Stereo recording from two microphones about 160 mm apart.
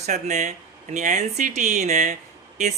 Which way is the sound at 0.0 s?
45° right (ahead or behind).